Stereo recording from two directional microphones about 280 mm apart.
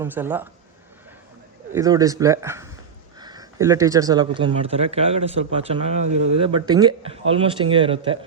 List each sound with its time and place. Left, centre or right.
0.0 s speech: centre
1.7 s speech: centre
6.1 s speech: right
6.4 s speech: centre